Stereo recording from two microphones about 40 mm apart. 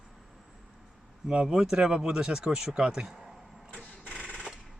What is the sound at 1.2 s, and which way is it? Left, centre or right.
Speech, right.